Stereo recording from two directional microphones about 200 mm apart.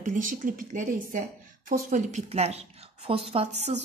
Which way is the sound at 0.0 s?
40° right (ahead or behind).